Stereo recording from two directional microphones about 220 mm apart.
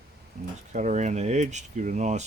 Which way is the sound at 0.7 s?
35° right (ahead or behind).